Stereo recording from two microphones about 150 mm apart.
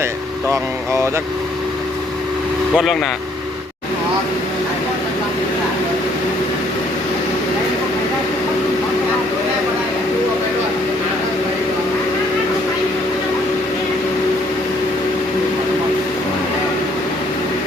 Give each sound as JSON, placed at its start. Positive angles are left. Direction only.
{"t": 0.5, "sound": "speech", "side_deg": -20}
{"t": 2.7, "sound": "speech", "side_deg": 0}